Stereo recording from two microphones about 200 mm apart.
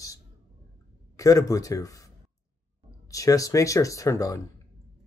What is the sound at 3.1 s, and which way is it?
Speech, 15° left (ahead or behind).